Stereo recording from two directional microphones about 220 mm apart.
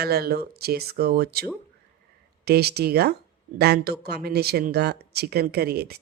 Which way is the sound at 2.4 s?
45° right (ahead or behind).